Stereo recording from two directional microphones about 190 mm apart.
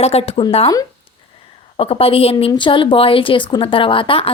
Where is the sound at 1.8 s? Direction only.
30° left (ahead or behind).